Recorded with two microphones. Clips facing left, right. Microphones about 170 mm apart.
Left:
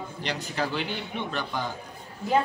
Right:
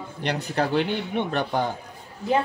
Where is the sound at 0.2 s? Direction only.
60° right (ahead or behind).